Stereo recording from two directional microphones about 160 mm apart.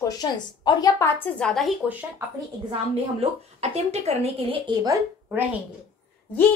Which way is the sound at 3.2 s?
40° right (ahead or behind).